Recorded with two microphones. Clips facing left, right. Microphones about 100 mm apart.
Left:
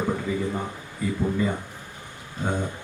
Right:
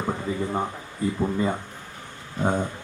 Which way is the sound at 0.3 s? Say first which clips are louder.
Even; 35° right (ahead or behind).